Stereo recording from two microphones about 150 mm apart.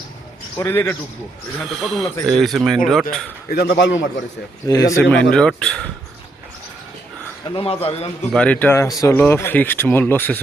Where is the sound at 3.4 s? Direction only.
90° left.